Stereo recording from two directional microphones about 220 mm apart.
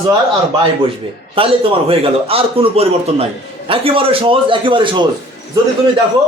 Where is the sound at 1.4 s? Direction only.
25° right (ahead or behind).